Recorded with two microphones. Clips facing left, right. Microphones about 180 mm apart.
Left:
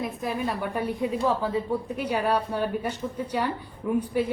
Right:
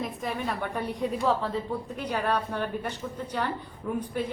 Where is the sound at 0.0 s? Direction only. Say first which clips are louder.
Left 3 dB; centre (ahead or behind).